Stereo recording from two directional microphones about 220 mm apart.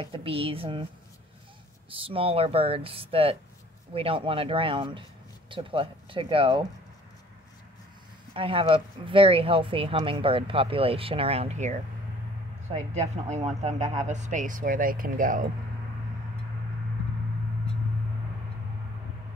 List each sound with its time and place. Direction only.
0.0 s speech: 25° right (ahead or behind)
1.9 s speech: 25° right (ahead or behind)
8.3 s speech: 25° right (ahead or behind)